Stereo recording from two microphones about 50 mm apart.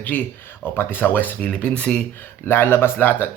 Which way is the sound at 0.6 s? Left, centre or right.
Left.